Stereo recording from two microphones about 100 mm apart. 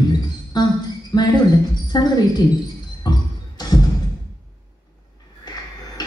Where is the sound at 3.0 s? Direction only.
40° left (ahead or behind).